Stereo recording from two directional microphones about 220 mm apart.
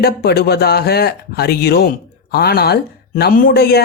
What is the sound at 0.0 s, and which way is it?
Speech, 45° left (ahead or behind).